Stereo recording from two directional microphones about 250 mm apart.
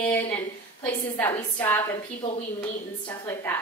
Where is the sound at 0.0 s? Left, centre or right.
Centre.